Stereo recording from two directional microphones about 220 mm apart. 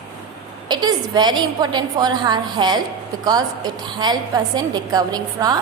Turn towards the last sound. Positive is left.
turn(degrees=-15)  # may be behind; listen again after turning